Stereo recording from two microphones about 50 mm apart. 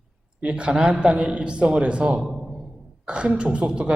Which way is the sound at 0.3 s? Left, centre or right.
Right.